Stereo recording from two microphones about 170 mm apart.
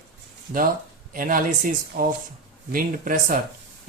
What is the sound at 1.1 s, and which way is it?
Speech, 55° right (ahead or behind).